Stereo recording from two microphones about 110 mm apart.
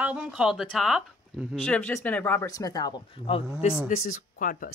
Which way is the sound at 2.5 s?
35° left (ahead or behind).